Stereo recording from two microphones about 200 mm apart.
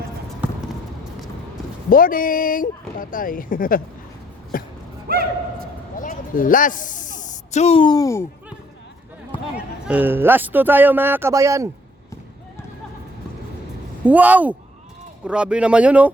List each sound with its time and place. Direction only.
1.9 s speech: 45° left (ahead or behind)
4.5 s a sound: 45° left (ahead or behind)
5.0 s a sound: 50° right (ahead or behind)
6.0 s speech: 45° left (ahead or behind); by 8.3 s 15° left (ahead or behind)
9.8 s speech: 10° right (ahead or behind)
14.0 s speech: 10° right (ahead or behind)